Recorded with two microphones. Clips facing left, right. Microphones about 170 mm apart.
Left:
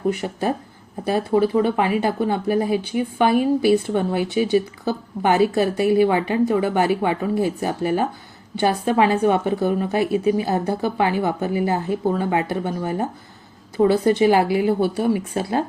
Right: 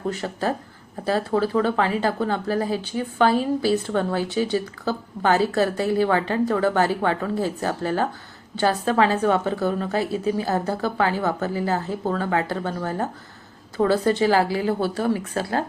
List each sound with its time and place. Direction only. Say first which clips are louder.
0.1 s a woman's voice: left 3 dB; 15° left (ahead or behind)